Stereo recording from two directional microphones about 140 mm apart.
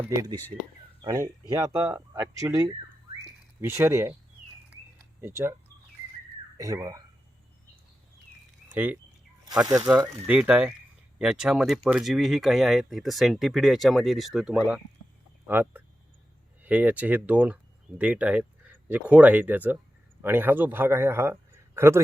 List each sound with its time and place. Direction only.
0.0 s speech: 25° right (ahead or behind)
5.2 s speech: 20° right (ahead or behind)
6.6 s speech: 25° right (ahead or behind)
8.7 s a man's voice: 15° right (ahead or behind)